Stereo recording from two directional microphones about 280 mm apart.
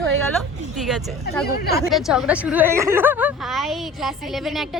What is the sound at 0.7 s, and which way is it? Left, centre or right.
Speech, centre.